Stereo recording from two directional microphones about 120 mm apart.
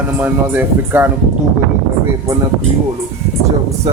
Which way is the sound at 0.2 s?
15° right (ahead or behind).